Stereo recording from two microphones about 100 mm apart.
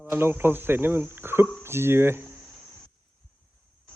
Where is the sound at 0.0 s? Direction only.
20° right (ahead or behind).